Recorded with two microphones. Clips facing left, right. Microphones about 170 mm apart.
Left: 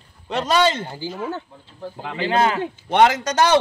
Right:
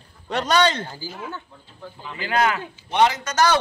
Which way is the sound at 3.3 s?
30° left (ahead or behind).